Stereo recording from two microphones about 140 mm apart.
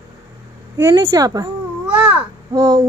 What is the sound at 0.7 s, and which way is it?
Speech, 20° right (ahead or behind).